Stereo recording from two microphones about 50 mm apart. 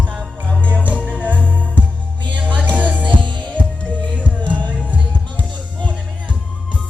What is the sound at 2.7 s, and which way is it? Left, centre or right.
Music, right.